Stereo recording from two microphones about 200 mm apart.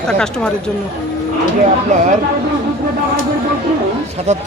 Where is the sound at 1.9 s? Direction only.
35° right (ahead or behind).